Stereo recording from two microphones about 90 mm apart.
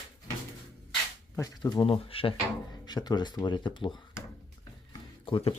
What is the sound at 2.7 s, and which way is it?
Speech, 50° left (ahead or behind).